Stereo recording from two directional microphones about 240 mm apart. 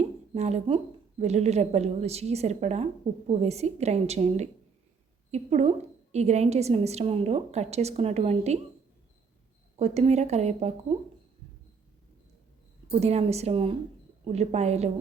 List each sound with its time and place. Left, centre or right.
0.3 s a woman's voice: right
9.7 s a woman's voice: right
12.9 s a woman's voice: right